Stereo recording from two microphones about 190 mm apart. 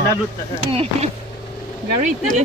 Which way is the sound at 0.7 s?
30° right (ahead or behind).